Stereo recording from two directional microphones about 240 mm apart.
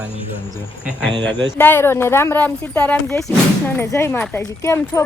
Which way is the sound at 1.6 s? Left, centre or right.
Centre.